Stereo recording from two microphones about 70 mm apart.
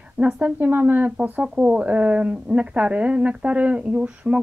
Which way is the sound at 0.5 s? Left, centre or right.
Right.